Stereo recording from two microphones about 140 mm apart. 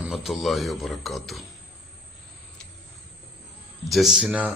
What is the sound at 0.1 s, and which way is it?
Speech, centre (ahead or behind).